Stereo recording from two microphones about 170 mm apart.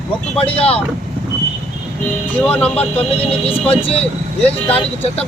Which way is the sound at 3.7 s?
35° left (ahead or behind).